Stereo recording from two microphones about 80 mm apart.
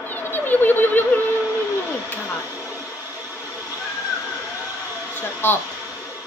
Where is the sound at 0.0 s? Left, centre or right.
Left.